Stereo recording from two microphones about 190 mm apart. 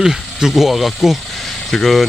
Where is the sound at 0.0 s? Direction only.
Centre (ahead or behind).